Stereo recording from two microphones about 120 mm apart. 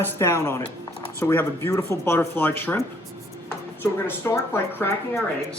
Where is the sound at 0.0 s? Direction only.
20° left (ahead or behind).